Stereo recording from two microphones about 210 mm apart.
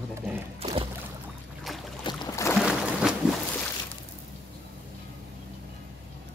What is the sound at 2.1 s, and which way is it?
Boat, 15° left (ahead or behind).